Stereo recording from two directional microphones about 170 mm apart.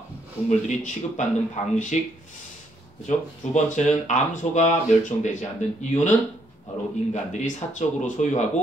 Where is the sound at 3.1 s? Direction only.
45° left (ahead or behind).